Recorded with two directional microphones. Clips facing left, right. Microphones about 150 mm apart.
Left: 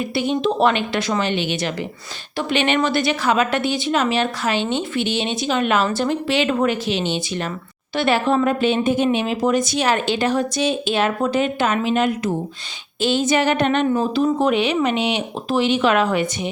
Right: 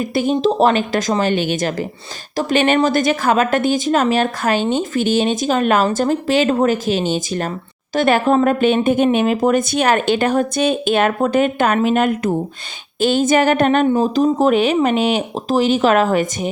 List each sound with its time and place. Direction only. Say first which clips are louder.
0.0 s a woman's voice: right 4 dB; 45° right (ahead or behind)